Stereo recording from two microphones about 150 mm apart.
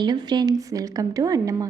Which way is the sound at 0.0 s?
30° right (ahead or behind).